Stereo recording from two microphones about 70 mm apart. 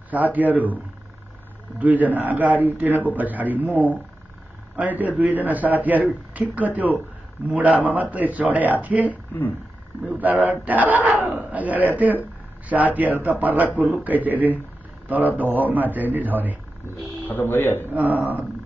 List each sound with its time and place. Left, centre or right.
0.1 s a man's voice: right
1.8 s a man's voice: right
17.3 s speech: left
17.9 s a man's voice: right